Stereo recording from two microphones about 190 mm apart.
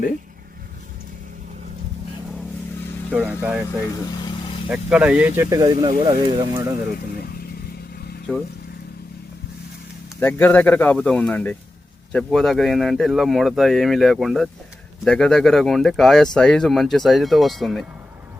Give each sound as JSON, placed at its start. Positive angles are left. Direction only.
{"t": 3.1, "sound": "speech", "side_deg": -10}
{"t": 4.1, "sound": "vehicle", "side_deg": 20}
{"t": 4.7, "sound": "speech", "side_deg": -5}
{"t": 8.3, "sound": "speech", "side_deg": 5}
{"t": 10.2, "sound": "speech", "side_deg": 10}